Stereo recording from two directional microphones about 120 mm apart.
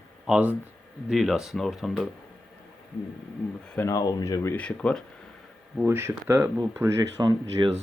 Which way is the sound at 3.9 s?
25° left (ahead or behind).